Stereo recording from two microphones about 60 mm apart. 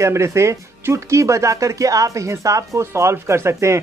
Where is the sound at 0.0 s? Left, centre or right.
Right.